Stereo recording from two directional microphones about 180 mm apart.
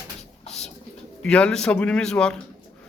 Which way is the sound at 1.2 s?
5° left (ahead or behind).